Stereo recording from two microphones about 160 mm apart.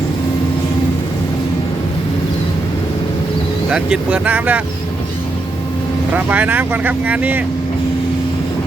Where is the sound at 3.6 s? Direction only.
5° right (ahead or behind).